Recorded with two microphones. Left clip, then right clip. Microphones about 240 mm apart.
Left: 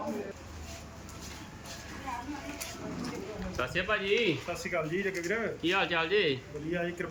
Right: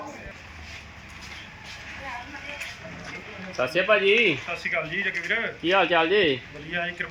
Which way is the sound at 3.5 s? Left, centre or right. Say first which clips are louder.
Right 10 dB; right.